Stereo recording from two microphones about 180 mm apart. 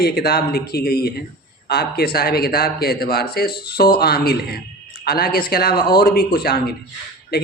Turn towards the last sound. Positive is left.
turn(degrees=55)  # may be behind; listen again after turning